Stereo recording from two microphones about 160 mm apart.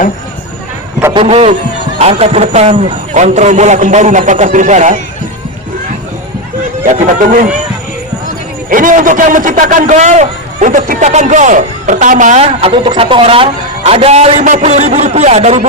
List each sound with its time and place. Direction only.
1.1 s a man's voice: 35° right (ahead or behind)
6.8 s a man's voice: 55° right (ahead or behind)
8.7 s a man's voice: 55° right (ahead or behind); by 14.4 s 40° right (ahead or behind)
14.4 s a man's voice: 50° right (ahead or behind)